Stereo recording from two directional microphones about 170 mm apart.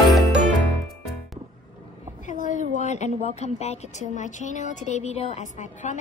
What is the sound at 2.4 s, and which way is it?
Speech, 45° left (ahead or behind).